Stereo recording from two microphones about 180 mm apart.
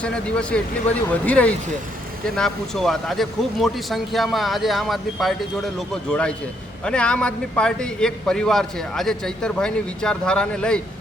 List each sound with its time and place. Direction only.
0.0 s speech: 5° left (ahead or behind)